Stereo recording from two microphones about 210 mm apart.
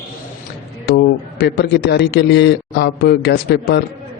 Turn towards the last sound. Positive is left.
turn(degrees=50)  # may be behind; listen again after turning